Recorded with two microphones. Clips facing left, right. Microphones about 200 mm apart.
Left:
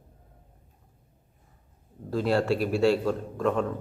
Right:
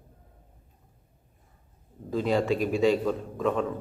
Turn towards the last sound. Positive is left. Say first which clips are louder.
# left 1 dB
turn(degrees=0)  # may be behind; listen again after turning